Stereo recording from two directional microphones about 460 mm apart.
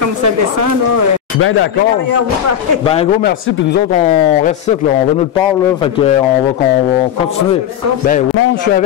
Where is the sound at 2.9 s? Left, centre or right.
Centre.